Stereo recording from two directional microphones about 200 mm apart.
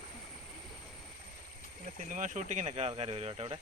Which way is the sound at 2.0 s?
40° right (ahead or behind).